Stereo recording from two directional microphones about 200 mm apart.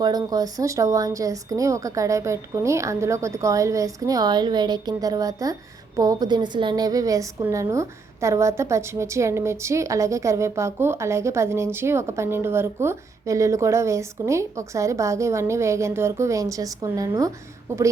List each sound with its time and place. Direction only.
0.0 s a woman's voice: 20° right (ahead or behind)